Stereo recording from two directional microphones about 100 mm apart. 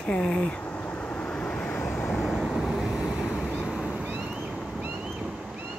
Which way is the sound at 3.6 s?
5° right (ahead or behind).